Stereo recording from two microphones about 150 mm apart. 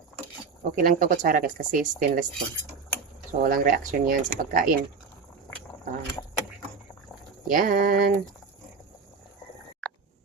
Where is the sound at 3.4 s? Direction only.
70° right (ahead or behind).